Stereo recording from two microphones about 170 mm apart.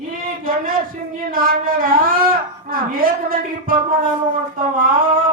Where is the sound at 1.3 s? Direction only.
55° right (ahead or behind).